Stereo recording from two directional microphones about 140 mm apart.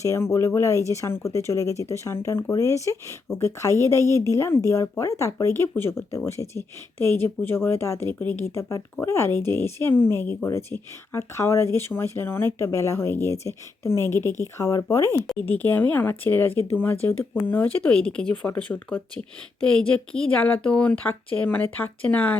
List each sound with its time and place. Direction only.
0.0 s speech: 20° left (ahead or behind)
15.4 s speech: 15° left (ahead or behind)